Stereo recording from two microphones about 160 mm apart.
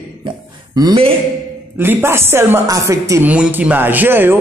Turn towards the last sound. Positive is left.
turn(degrees=-15)  # may be behind; listen again after turning